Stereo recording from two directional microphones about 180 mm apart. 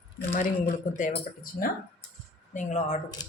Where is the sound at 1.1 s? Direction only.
55° left (ahead or behind).